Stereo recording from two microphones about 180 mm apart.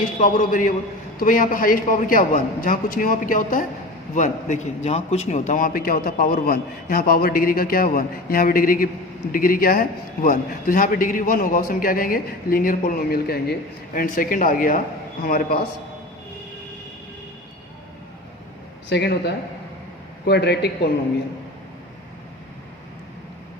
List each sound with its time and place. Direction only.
0.0 s a man's voice: 45° left (ahead or behind)
18.9 s a man's voice: 65° left (ahead or behind)